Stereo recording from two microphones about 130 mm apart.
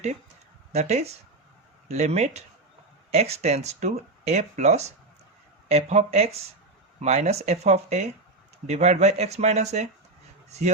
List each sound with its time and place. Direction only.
0.7 s speech: 60° right (ahead or behind)